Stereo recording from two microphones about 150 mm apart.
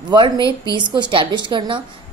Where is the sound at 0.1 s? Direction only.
30° right (ahead or behind).